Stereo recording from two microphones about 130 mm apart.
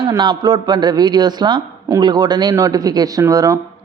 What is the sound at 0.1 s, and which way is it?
A man's voice, 35° right (ahead or behind).